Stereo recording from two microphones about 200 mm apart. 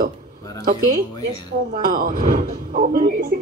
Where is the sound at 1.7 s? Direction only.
45° right (ahead or behind).